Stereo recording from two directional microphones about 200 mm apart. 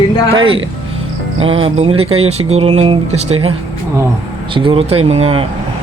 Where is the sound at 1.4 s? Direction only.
30° right (ahead or behind).